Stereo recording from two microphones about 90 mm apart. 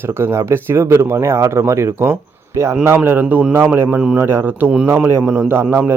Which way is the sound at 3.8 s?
15° right (ahead or behind).